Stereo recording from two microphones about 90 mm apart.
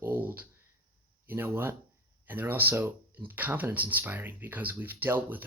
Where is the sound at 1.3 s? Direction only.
25° right (ahead or behind).